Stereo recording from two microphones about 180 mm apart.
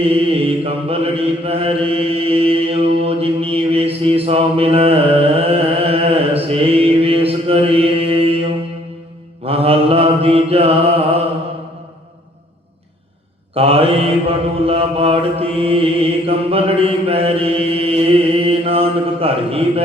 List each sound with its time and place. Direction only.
0.0 s mantra: 30° right (ahead or behind)
9.5 s mantra: 30° right (ahead or behind)
13.5 s mantra: 30° right (ahead or behind)